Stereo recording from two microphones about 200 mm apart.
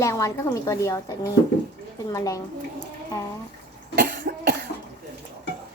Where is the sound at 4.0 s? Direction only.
45° right (ahead or behind).